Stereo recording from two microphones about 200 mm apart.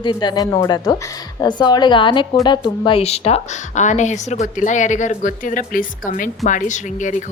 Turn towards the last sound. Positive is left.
turn(degrees=40)  # may be behind; listen again after turning